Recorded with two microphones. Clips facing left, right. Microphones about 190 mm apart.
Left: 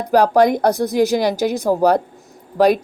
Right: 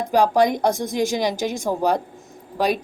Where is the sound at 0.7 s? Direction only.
35° left (ahead or behind).